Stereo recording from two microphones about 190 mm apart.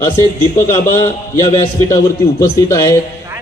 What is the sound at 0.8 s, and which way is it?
Speech, 40° left (ahead or behind).